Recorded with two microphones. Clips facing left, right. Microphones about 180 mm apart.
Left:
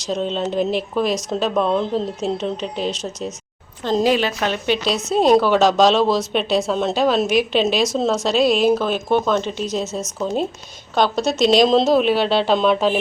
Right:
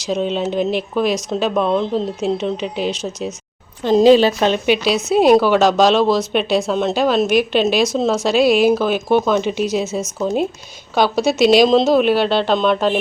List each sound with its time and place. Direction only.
0.1 s speech: 5° right (ahead or behind)
4.0 s a woman's voice: 30° right (ahead or behind)
4.6 s speech: 10° right (ahead or behind)